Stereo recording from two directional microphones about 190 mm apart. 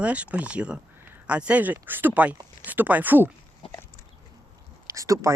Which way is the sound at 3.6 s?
30° left (ahead or behind).